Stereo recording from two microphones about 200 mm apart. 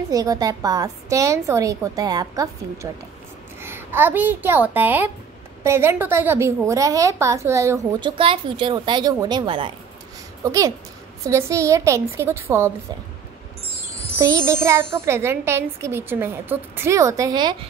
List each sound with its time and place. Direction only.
0.1 s a child's voice: 15° right (ahead or behind)
8.2 s a woman's voice: 25° right (ahead or behind)
14.1 s a child's voice: 15° right (ahead or behind)